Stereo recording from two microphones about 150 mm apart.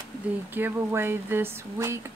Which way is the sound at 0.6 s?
15° right (ahead or behind).